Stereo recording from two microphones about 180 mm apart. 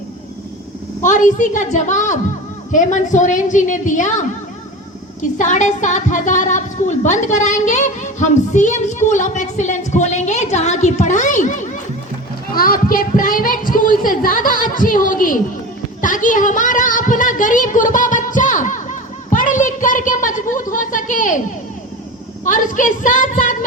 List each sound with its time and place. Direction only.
1.0 s a woman's voice: 45° left (ahead or behind)
5.4 s a woman's voice: 45° left (ahead or behind)
12.5 s a woman's voice: 55° left (ahead or behind)
16.0 s a sound: 45° left (ahead or behind)
22.4 s a woman's voice: 45° left (ahead or behind)